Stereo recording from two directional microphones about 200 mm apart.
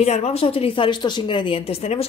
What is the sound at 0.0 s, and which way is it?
A woman's voice, 30° left (ahead or behind).